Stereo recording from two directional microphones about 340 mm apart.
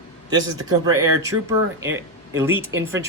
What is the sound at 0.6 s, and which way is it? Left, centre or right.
Speech, centre.